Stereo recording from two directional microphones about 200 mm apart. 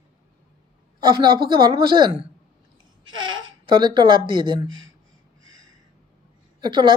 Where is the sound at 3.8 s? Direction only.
25° right (ahead or behind).